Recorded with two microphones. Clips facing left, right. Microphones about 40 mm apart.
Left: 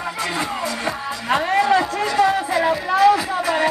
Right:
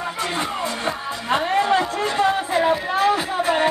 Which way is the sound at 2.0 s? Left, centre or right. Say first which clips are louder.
Left 2 dB; right.